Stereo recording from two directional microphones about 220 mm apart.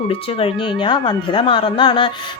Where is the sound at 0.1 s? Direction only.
25° left (ahead or behind).